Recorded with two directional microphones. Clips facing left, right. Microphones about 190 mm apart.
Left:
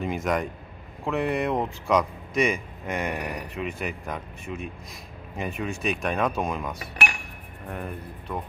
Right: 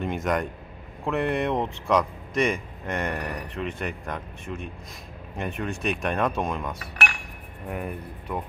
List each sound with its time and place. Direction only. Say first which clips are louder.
0.0 s speech: even; centre (ahead or behind)
7.6 s speech: right 2 dB; 10° right (ahead or behind)